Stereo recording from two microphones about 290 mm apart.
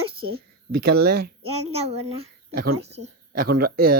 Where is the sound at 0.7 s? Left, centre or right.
Right.